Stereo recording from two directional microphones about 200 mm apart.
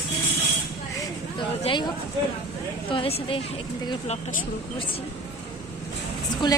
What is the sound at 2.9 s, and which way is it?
A woman's voice, 25° left (ahead or behind).